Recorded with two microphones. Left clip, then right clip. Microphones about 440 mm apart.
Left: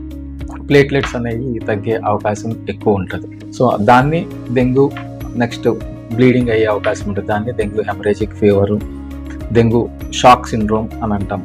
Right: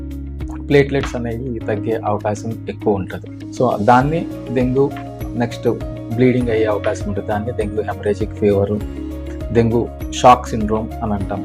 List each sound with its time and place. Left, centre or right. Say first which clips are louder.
0.7 s speech: left 3 dB; right
6.1 s speech: left 3 dB; right